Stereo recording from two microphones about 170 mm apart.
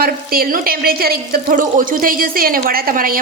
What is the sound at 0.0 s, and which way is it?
A woman's voice, 60° right (ahead or behind).